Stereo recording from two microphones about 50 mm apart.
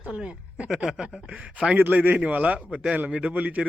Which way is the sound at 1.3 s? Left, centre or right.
Right.